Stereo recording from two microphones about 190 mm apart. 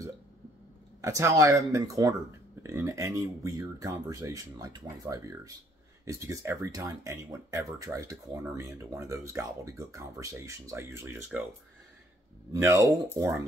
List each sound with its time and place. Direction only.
1.0 s speech: 15° right (ahead or behind)
12.5 s speech: 15° right (ahead or behind)